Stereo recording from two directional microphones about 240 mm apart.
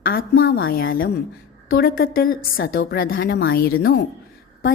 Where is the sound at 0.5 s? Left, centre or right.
Left.